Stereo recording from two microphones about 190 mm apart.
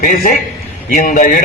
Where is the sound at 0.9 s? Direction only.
45° left (ahead or behind).